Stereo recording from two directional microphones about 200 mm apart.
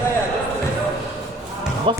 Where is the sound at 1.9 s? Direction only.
25° right (ahead or behind).